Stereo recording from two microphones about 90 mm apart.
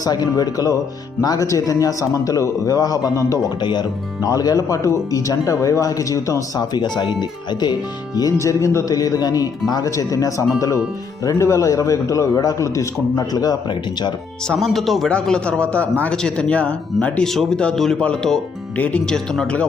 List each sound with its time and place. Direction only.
0.0 s a man's voice: 45° left (ahead or behind)
3.6 s speech: 60° left (ahead or behind)
4.2 s a man's voice: 45° left (ahead or behind)
6.6 s a man's voice: 55° left (ahead or behind)
14.4 s a man's voice: 5° left (ahead or behind)